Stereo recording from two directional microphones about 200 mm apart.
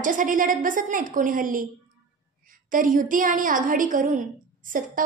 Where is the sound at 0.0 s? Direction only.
40° right (ahead or behind).